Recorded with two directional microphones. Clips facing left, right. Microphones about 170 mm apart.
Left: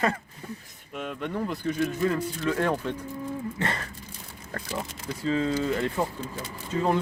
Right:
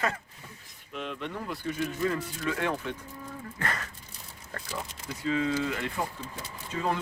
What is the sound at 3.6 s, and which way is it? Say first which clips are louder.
Speech: left 1 dB; 30° left (ahead or behind).